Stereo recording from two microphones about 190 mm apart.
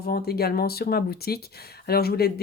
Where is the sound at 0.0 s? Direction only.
55° left (ahead or behind).